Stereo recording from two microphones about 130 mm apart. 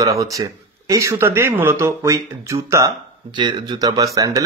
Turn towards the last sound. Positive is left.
turn(degrees=-25)  # may be behind; listen again after turning